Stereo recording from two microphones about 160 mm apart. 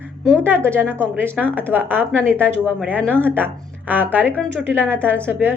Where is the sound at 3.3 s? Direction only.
10° right (ahead or behind).